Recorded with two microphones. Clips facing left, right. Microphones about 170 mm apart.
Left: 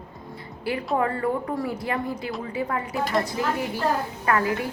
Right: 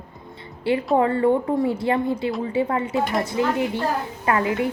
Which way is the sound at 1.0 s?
25° right (ahead or behind).